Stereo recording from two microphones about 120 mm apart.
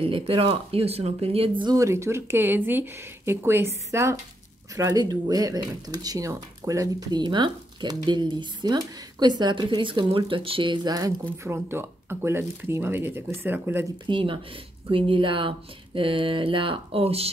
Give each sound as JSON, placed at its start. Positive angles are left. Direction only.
{"t": 0.0, "sound": "speech", "side_deg": -50}
{"t": 1.6, "sound": "speech", "side_deg": -30}
{"t": 14.0, "sound": "speech", "side_deg": -45}